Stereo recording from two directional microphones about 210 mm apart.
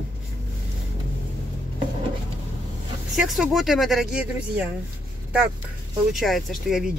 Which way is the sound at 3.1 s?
Centre (ahead or behind).